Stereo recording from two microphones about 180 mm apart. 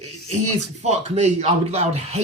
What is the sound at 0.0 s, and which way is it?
Speech, 40° right (ahead or behind).